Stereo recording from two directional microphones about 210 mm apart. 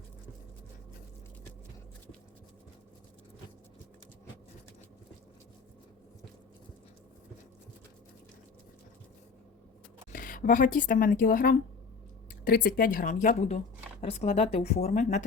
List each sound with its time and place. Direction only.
10.1 s speech: 40° left (ahead or behind)